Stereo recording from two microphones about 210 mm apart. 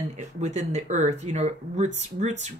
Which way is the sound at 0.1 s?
35° right (ahead or behind).